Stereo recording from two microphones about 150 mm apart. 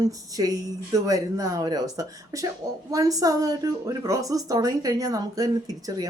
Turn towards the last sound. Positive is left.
turn(degrees=-25)  # may be behind; listen again after turning